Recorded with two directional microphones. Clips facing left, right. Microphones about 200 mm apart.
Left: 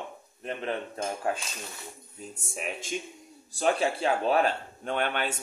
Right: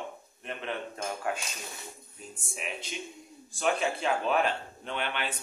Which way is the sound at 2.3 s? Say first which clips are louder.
Left 3 dB; 45° left (ahead or behind).